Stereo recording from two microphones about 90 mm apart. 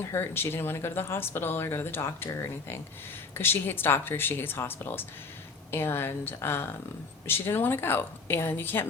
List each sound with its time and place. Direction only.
0.0 s speech: 30° left (ahead or behind)